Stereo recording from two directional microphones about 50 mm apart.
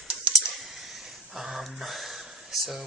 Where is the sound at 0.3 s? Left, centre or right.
Centre.